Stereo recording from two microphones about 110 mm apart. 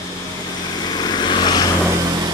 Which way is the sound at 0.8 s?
40° left (ahead or behind).